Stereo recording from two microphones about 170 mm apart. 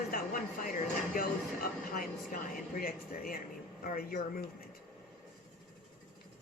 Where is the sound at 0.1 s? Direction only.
55° left (ahead or behind).